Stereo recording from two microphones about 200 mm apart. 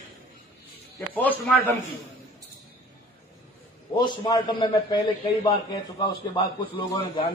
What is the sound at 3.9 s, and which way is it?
A man's voice, 20° left (ahead or behind).